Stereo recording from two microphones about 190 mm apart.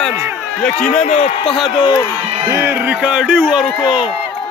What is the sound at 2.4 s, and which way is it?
A man's voice, 15° right (ahead or behind).